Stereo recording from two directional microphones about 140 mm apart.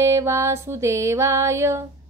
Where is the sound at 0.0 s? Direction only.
20° right (ahead or behind).